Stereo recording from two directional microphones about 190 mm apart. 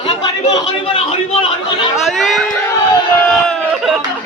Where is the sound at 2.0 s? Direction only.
Centre (ahead or behind).